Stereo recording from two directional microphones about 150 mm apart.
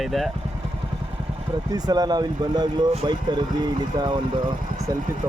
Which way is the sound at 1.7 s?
25° right (ahead or behind).